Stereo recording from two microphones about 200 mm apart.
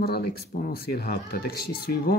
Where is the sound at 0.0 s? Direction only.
50° left (ahead or behind).